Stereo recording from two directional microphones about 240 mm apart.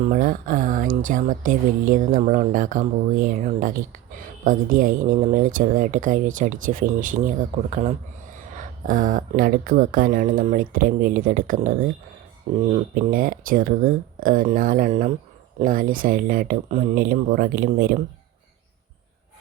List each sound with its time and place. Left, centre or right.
0.0 s speech: right